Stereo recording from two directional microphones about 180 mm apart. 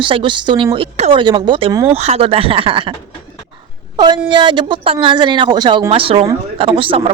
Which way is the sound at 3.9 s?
25° right (ahead or behind).